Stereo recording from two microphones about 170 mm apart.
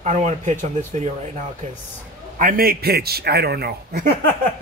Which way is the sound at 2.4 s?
60° right (ahead or behind).